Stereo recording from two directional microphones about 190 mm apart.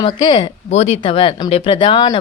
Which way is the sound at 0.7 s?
35° left (ahead or behind).